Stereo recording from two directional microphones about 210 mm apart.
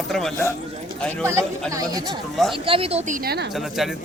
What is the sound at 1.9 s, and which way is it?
A woman's voice, 15° right (ahead or behind).